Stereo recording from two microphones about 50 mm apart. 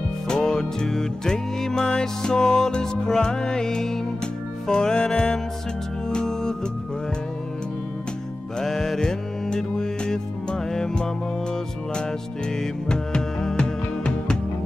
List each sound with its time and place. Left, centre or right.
0.3 s music: centre
8.5 s music: centre
12.5 s music: centre